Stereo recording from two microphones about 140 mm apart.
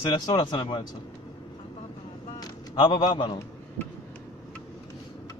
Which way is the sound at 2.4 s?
30° left (ahead or behind).